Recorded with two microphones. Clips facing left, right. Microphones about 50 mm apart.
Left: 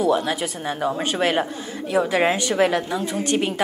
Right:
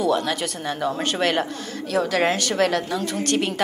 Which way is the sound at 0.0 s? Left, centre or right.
Centre.